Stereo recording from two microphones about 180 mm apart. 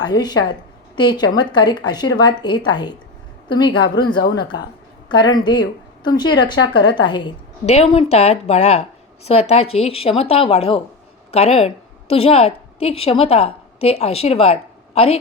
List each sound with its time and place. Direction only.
0.0 s a woman's voice: 25° left (ahead or behind)